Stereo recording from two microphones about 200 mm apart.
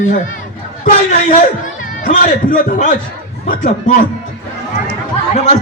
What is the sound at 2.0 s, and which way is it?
Speech, 40° left (ahead or behind).